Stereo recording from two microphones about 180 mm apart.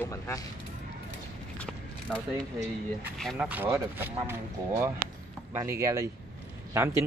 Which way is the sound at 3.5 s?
10° right (ahead or behind).